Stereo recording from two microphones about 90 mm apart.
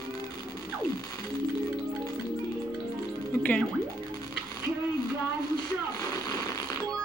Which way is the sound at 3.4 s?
15° left (ahead or behind).